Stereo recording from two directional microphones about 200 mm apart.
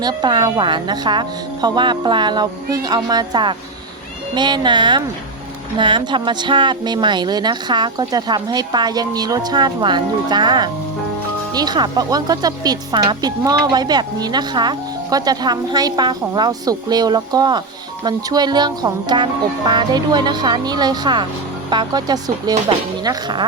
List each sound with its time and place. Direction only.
0.0 s speech: 20° right (ahead or behind)